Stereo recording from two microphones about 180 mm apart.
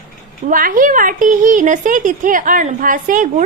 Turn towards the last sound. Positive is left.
turn(degrees=-45)  # may be behind; listen again after turning